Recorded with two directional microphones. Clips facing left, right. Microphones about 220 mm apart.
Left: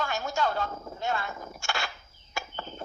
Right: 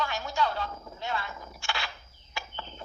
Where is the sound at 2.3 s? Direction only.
45° left (ahead or behind).